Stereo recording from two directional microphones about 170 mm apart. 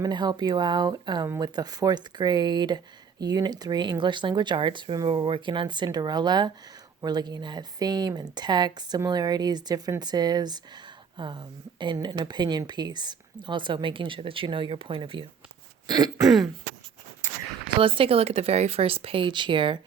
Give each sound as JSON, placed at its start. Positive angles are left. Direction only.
{"t": 0.0, "sound": "speech", "side_deg": -25}
{"t": 16.2, "sound": "throat clearing", "side_deg": 0}
{"t": 17.7, "sound": "speech", "side_deg": -30}